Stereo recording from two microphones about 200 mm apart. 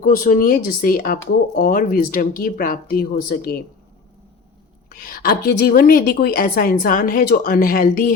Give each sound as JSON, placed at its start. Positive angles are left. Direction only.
{"t": 0.0, "sound": "speech", "side_deg": 45}
{"t": 4.9, "sound": "speech", "side_deg": 45}